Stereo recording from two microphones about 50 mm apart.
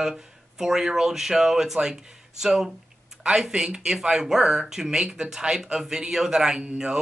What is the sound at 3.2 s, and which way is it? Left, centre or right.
Speech, centre.